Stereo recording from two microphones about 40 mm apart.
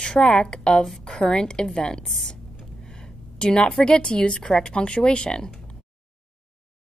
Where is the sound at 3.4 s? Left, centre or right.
Left.